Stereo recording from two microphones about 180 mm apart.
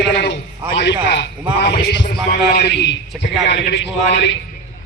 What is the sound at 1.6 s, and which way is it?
A man's voice, 60° left (ahead or behind).